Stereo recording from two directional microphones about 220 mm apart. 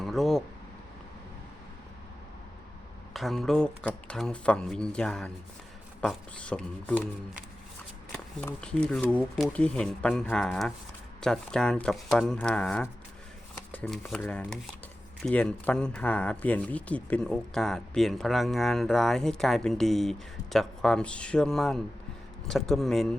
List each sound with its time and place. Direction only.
0.0 s a sound: centre (ahead or behind)
3.1 s speech: centre (ahead or behind)
8.1 s speech: 5° left (ahead or behind)